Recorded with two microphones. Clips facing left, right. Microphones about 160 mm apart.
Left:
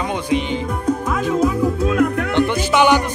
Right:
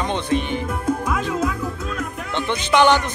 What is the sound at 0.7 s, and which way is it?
Music, 5° right (ahead or behind).